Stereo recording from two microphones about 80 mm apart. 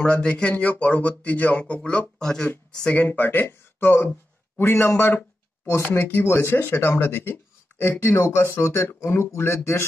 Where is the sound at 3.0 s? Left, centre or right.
Left.